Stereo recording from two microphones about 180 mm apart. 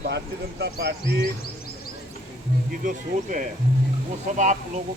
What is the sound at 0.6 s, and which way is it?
Speech, 65° right (ahead or behind).